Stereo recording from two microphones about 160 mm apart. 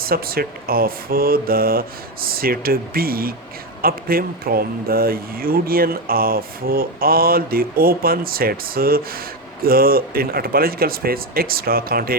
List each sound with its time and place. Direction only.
0.0 s speech: 70° right (ahead or behind)